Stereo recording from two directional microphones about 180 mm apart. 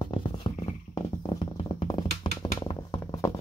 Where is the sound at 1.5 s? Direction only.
25° left (ahead or behind).